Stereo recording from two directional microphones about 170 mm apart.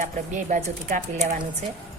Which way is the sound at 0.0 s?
50° right (ahead or behind).